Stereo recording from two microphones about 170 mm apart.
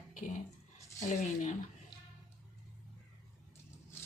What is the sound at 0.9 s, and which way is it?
Speech, 45° left (ahead or behind).